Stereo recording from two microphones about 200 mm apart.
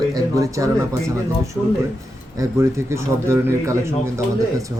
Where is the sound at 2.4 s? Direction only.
15° right (ahead or behind).